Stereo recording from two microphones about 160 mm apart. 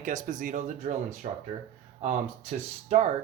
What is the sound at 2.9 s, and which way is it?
Speech, 45° right (ahead or behind).